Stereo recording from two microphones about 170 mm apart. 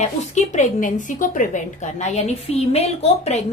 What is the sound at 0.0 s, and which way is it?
A woman's voice, 45° left (ahead or behind).